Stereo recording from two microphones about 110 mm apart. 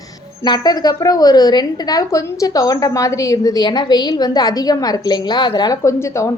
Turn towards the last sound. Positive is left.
turn(degrees=30)  # may be behind; listen again after turning